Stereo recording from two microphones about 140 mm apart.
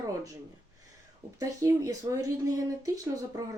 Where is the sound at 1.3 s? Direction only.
25° right (ahead or behind).